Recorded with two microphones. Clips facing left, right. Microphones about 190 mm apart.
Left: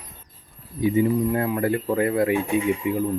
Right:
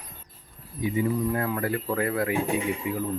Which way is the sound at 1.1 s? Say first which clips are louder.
Left 4 dB; 20° left (ahead or behind).